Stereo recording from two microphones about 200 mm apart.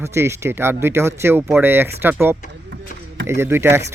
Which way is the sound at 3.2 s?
10° right (ahead or behind).